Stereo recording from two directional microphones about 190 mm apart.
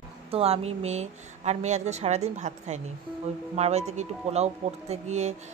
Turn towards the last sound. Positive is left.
turn(degrees=-35)  # may be behind; listen again after turning